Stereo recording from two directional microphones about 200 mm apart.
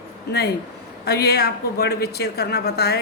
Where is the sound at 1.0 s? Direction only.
55° left (ahead or behind).